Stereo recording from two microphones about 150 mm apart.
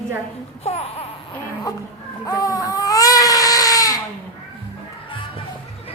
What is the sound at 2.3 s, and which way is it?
Baby cry, 25° left (ahead or behind).